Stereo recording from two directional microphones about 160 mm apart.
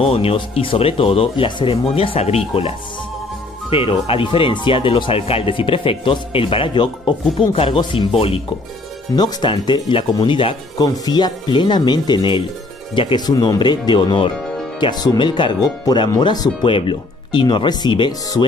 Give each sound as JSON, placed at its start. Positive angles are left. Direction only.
{"t": 0.0, "sound": "speech", "side_deg": 35}
{"t": 3.7, "sound": "speech", "side_deg": 35}